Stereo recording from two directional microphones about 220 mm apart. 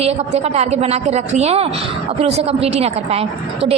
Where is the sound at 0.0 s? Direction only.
30° right (ahead or behind).